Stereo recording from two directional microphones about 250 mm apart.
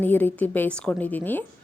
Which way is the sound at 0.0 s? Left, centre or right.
Centre.